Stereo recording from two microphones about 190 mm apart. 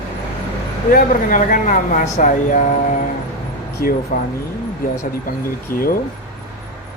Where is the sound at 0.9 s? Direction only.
45° left (ahead or behind).